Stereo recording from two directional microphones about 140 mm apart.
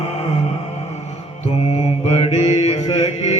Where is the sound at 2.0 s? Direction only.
50° left (ahead or behind).